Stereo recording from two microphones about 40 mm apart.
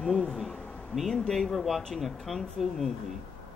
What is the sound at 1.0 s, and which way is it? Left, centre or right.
Speech, centre.